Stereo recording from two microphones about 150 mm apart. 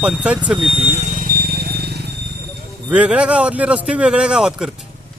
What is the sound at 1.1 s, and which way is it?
Vehicle, 75° right (ahead or behind).